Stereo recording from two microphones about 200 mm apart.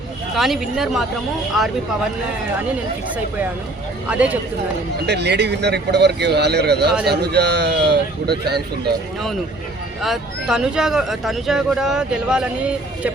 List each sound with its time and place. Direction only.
0.3 s speech: centre (ahead or behind)
4.0 s speech: 5° right (ahead or behind)
5.0 s speech: 55° right (ahead or behind)
10.0 s speech: centre (ahead or behind)